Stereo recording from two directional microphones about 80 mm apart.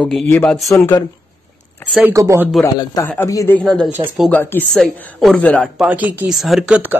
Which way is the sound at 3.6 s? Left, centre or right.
Centre.